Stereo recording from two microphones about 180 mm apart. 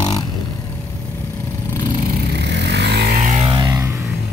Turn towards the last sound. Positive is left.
turn(degrees=-20)  # may be behind; listen again after turning